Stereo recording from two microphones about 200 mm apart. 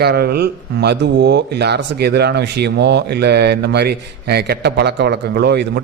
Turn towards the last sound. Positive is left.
turn(degrees=-55)  # may be behind; listen again after turning